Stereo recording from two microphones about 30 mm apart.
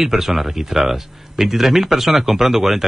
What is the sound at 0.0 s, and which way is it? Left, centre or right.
Speech, centre.